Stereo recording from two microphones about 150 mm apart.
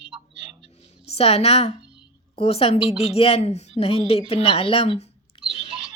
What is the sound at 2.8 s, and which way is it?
Speech, 5° right (ahead or behind).